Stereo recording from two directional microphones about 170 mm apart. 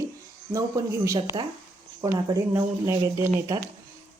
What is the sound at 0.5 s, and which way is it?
A woman's voice, 20° right (ahead or behind).